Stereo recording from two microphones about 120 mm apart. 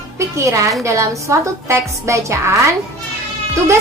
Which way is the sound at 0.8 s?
25° right (ahead or behind).